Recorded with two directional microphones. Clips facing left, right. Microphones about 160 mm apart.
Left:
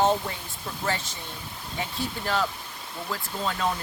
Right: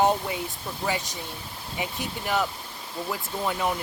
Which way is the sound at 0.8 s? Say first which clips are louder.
Right 1 dB; 15° right (ahead or behind).